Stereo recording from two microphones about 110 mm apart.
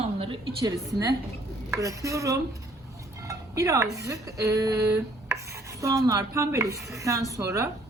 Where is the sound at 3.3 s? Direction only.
30° right (ahead or behind).